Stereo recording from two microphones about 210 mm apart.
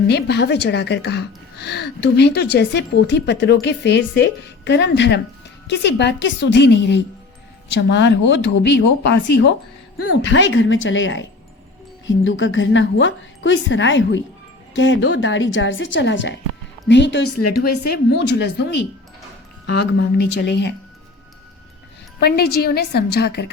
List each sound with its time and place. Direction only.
0.1 s a woman's voice: 50° left (ahead or behind)
10.0 s a woman's voice: 90° left
10.2 s a woman's voice: 60° left (ahead or behind)
18.2 s speech: 50° left (ahead or behind)
22.2 s speech: 50° left (ahead or behind)